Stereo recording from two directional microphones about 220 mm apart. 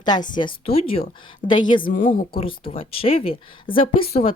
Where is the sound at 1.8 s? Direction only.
35° left (ahead or behind).